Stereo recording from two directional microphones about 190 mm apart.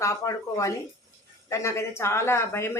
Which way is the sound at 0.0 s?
15° left (ahead or behind).